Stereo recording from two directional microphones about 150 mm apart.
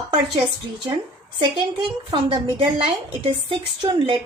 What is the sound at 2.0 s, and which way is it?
A woman's voice, 35° right (ahead or behind).